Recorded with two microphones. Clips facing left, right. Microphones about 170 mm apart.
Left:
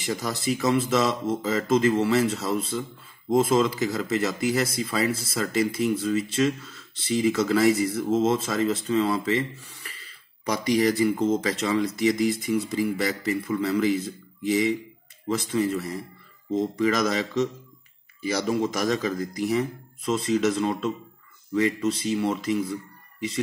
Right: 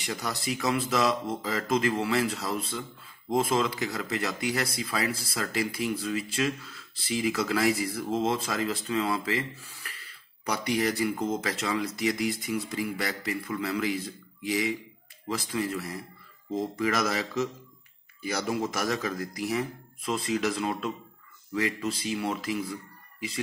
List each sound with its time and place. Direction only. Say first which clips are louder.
0.0 s speech: left 5 dB; centre (ahead or behind)
18.5 s speech: left 5 dB; centre (ahead or behind)